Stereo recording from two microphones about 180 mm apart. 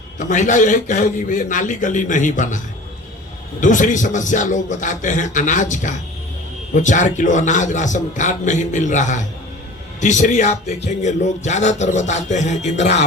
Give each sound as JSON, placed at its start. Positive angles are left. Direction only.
{"t": 0.2, "sound": "a man's voice", "side_deg": 45}
{"t": 3.6, "sound": "a man's voice", "side_deg": 45}